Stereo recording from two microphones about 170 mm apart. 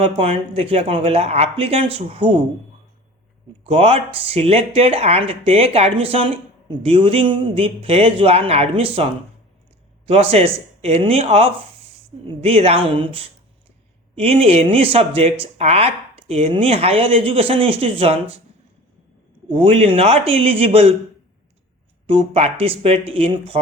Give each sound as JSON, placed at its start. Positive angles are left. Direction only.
{"t": 0.0, "sound": "speech", "side_deg": -35}
{"t": 3.6, "sound": "speech", "side_deg": -35}
{"t": 10.1, "sound": "speech", "side_deg": -35}
{"t": 19.5, "sound": "speech", "side_deg": -35}
{"t": 22.0, "sound": "speech", "side_deg": -35}